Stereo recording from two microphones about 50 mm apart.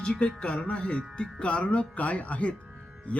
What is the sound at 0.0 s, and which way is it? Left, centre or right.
Speech, centre.